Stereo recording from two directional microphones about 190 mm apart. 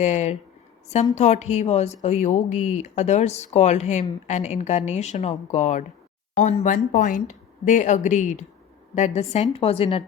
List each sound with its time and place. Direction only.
0.0 s speech: 35° left (ahead or behind)